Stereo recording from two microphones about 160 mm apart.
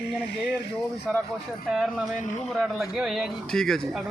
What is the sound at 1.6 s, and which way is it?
Speech, centre (ahead or behind).